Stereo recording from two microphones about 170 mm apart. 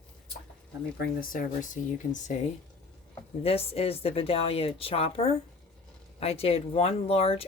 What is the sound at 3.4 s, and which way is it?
Speech, 35° left (ahead or behind).